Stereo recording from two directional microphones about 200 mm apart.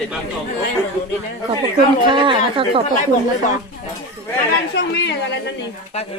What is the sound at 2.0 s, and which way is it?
Speech, 25° right (ahead or behind).